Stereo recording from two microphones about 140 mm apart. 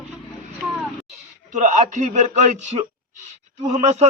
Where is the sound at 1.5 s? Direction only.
60° right (ahead or behind).